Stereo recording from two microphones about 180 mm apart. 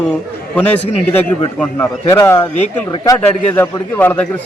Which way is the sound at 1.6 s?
10° left (ahead or behind).